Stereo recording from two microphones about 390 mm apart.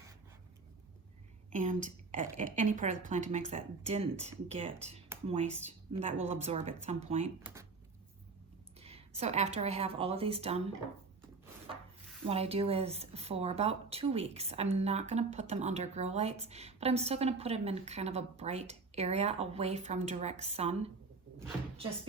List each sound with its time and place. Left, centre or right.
1.5 s a woman's voice: centre
8.8 s a woman's voice: centre
12.2 s a woman's voice: centre